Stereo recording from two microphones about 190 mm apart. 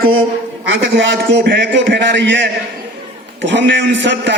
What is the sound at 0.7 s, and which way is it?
A man's voice, 80° right.